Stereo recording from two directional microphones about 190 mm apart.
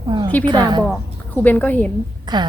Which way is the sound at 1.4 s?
10° left (ahead or behind).